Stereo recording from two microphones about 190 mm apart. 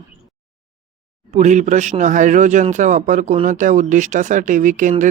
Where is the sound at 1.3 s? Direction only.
35° right (ahead or behind).